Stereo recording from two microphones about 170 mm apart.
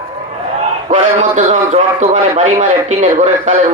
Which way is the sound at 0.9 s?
40° right (ahead or behind).